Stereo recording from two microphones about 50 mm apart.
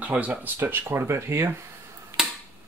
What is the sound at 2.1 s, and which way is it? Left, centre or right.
Finger snapping, right.